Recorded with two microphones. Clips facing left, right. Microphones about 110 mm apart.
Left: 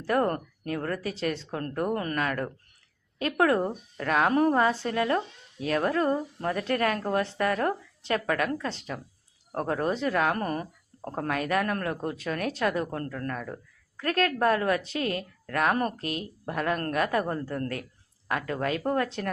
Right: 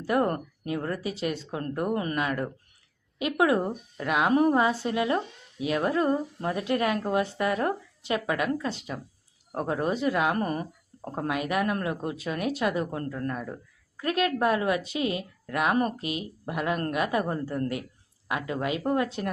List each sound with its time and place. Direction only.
0.0 s speech: 15° right (ahead or behind)